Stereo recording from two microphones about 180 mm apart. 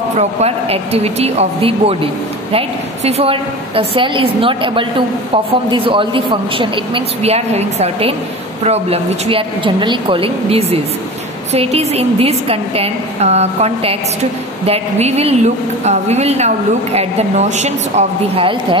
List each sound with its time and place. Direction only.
0.2 s a woman's voice: 35° right (ahead or behind)